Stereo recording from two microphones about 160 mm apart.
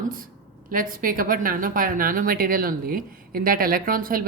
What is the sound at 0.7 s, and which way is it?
A woman's voice, 60° right (ahead or behind).